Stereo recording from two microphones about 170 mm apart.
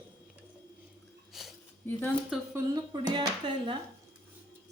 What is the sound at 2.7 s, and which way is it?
Speech, 25° right (ahead or behind).